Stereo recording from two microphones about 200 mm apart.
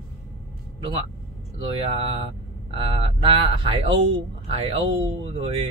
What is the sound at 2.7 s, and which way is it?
Mantra, 25° right (ahead or behind).